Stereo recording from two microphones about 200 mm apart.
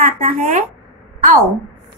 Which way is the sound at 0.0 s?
45° right (ahead or behind).